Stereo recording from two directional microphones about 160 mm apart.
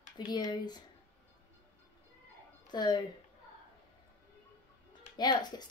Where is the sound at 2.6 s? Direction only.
25° left (ahead or behind).